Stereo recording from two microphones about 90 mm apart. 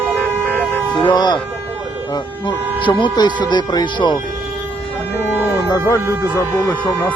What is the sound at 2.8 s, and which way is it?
Speech, 65° left (ahead or behind).